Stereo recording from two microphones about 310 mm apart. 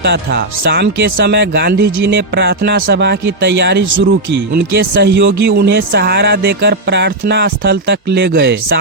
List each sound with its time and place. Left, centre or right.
0.0 s speech: right